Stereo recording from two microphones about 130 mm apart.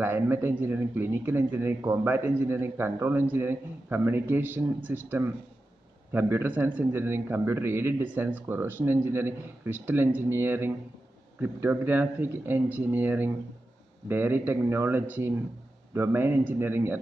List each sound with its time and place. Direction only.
0.0 s speech: 20° right (ahead or behind)